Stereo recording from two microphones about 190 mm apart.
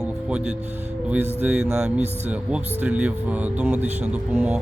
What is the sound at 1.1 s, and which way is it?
Speech, 10° right (ahead or behind).